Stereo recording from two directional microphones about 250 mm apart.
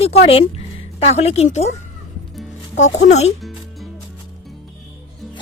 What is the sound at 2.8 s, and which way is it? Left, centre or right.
Speech, left.